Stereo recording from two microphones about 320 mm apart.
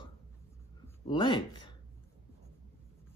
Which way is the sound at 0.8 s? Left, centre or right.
Centre.